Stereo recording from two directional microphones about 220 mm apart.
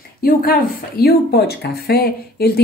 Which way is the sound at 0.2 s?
45° left (ahead or behind).